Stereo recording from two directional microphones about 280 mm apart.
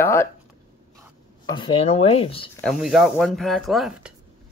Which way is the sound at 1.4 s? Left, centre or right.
Centre.